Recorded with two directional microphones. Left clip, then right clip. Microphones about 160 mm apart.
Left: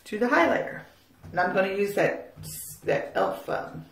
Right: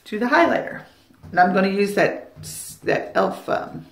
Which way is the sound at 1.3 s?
35° right (ahead or behind).